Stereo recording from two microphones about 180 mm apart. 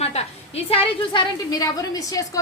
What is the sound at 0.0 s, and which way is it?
A woman's voice, 35° left (ahead or behind).